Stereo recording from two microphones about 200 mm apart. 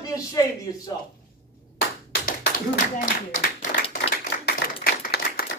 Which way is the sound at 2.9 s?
45° left (ahead or behind).